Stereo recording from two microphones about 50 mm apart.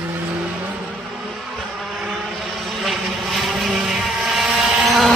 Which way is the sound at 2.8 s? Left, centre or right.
Centre.